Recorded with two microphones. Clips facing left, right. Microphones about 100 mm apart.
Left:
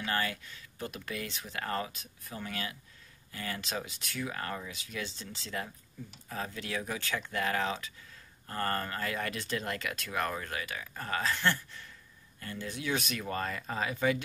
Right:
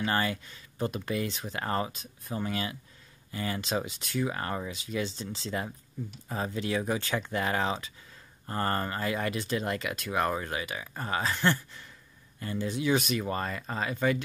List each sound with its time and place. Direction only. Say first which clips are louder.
0.0 s speech: right 4 dB; 25° right (ahead or behind)
12.6 s speech: right 7 dB; 20° right (ahead or behind); by 14.1 s centre (ahead or behind)